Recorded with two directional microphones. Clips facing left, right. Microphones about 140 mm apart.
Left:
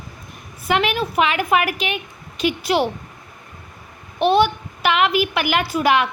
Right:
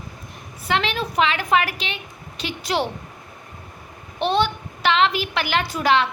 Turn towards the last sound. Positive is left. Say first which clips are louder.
# left 2 dB
turn(degrees=10)  # may be behind; listen again after turning